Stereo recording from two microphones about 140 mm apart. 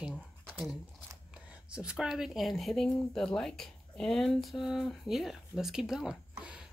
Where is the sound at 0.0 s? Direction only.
5° right (ahead or behind).